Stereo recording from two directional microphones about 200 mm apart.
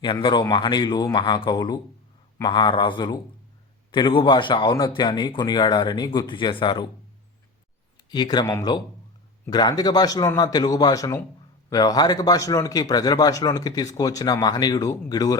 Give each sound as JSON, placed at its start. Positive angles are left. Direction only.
{"t": 0.0, "sound": "a man's voice", "side_deg": 25}
{"t": 8.1, "sound": "a man's voice", "side_deg": 20}